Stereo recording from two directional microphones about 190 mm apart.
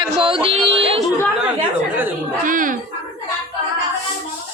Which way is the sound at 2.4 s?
45° right (ahead or behind).